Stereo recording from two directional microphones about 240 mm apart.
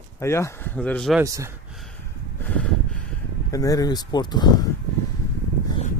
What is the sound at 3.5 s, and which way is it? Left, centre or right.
Speech, centre.